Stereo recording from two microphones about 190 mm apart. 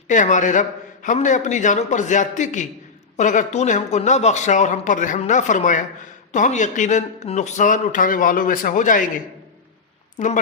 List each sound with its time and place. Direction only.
0.1 s a man's voice: 40° left (ahead or behind)
10.2 s a man's voice: 40° left (ahead or behind)